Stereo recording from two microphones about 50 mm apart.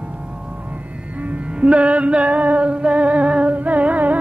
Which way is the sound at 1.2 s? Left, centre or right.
Right.